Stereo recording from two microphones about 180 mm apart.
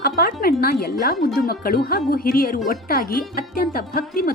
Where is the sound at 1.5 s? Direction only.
55° left (ahead or behind).